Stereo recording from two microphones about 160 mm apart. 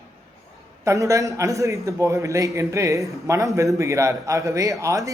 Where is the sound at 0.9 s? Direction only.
20° right (ahead or behind).